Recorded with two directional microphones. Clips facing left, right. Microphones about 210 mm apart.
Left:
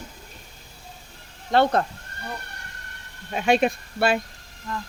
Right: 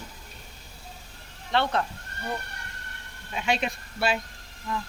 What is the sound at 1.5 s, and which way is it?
Speech, 45° left (ahead or behind).